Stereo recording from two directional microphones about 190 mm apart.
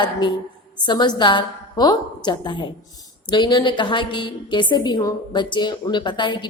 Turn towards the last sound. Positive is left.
turn(degrees=25)  # may be behind; listen again after turning